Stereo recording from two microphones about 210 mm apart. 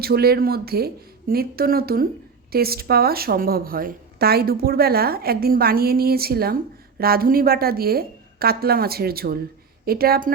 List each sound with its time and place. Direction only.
0.0 s a woman's voice: 50° right (ahead or behind)